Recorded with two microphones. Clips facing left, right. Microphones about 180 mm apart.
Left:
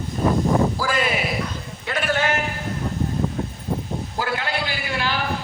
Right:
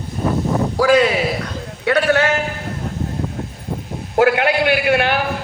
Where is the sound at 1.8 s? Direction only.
70° right (ahead or behind).